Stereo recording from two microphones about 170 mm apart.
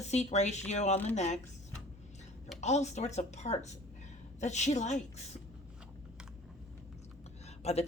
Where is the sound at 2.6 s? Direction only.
40° left (ahead or behind).